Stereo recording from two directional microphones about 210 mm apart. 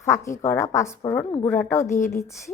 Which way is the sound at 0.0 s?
15° left (ahead or behind).